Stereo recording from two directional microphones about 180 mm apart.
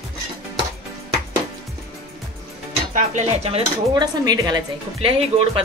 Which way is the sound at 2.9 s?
40° right (ahead or behind).